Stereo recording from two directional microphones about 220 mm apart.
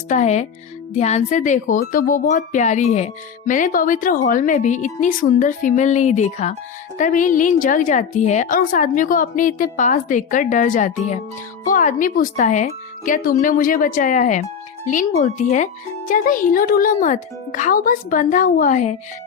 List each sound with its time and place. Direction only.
0.1 s a woman's voice: 30° left (ahead or behind)